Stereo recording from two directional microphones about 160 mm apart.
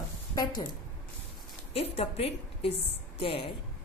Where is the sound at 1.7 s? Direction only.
40° left (ahead or behind).